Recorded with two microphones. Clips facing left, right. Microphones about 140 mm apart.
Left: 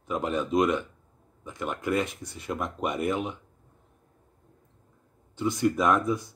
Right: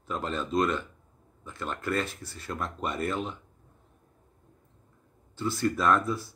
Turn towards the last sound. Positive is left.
turn(degrees=15)  # may be behind; listen again after turning